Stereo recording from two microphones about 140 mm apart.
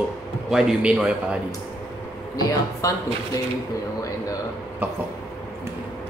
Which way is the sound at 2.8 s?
25° left (ahead or behind).